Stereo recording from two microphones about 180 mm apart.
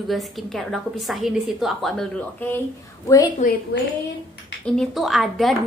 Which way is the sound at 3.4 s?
55° left (ahead or behind).